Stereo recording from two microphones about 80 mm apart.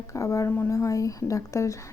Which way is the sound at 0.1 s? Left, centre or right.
Left.